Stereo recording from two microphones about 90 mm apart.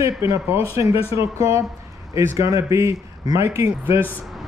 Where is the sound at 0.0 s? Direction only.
35° right (ahead or behind).